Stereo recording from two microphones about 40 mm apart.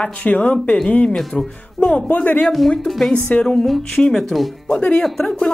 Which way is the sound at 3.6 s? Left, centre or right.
Centre.